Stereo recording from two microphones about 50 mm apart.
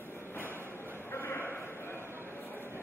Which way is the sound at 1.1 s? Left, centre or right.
Left.